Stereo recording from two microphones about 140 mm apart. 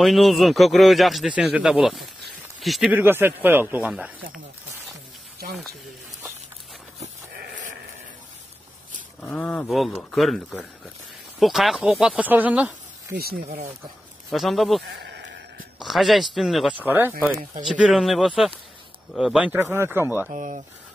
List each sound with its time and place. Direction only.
0.0 s a man's voice: centre (ahead or behind)
2.9 s speech: 15° right (ahead or behind)
3.8 s a man's voice: 5° right (ahead or behind)
9.2 s a man's voice: 10° left (ahead or behind); by 12.7 s 10° right (ahead or behind)
13.1 s speech: 90° right
14.3 s a man's voice: centre (ahead or behind)
15.8 s a man's voice: centre (ahead or behind)
16.8 s a man's voice: 15° right (ahead or behind)
20.2 s speech: 60° right (ahead or behind)